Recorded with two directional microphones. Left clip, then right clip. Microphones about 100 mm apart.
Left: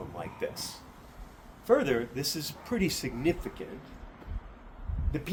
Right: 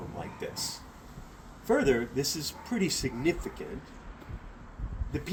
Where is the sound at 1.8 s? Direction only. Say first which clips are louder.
Right 3 dB; 50° left (ahead or behind).